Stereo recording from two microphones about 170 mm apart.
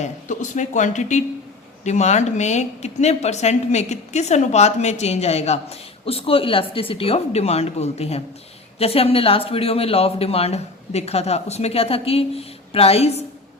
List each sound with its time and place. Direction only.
0.0 s a woman's voice: 45° left (ahead or behind)